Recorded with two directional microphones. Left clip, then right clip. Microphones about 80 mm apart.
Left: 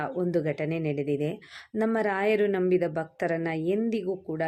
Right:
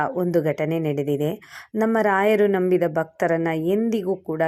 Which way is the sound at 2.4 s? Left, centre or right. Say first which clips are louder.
Right 6 dB; centre.